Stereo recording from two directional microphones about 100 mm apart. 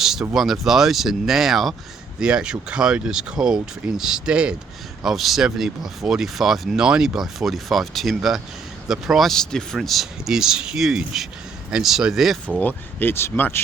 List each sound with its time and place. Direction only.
0.0 s speech: 5° right (ahead or behind)
12.5 s speech: 20° left (ahead or behind)